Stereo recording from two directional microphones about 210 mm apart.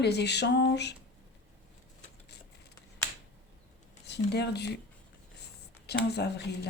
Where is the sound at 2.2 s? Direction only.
50° left (ahead or behind).